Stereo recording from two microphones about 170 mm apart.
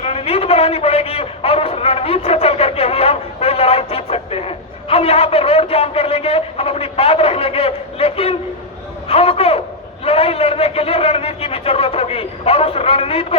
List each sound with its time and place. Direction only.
0.0 s a man's voice: 35° left (ahead or behind)